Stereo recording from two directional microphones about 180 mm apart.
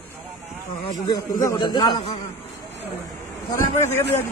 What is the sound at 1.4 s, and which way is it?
Speech, 25° left (ahead or behind).